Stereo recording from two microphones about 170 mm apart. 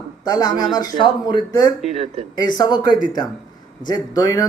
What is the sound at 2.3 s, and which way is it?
Speech, 25° left (ahead or behind).